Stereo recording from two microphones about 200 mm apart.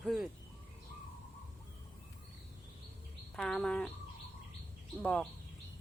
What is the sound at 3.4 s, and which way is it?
Speech, 5° left (ahead or behind).